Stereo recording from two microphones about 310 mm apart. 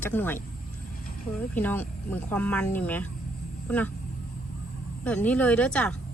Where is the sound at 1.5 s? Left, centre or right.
Centre.